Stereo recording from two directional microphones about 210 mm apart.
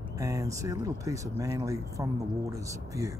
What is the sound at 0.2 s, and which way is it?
Speech, 15° right (ahead or behind).